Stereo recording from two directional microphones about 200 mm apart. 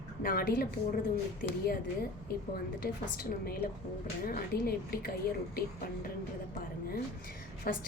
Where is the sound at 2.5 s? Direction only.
50° left (ahead or behind).